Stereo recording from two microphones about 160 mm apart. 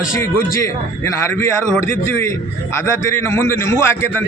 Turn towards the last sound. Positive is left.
turn(degrees=15)  # may be behind; listen again after turning